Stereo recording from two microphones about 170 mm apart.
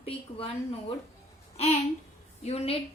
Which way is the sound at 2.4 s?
35° left (ahead or behind).